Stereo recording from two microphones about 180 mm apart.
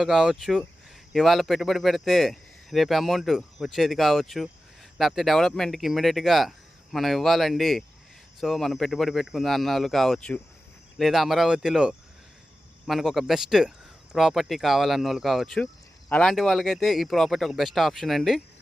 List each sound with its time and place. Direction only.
0.0 s speech: 5° right (ahead or behind)